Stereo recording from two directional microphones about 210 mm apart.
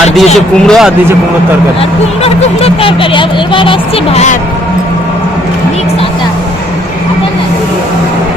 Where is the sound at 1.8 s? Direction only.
30° left (ahead or behind).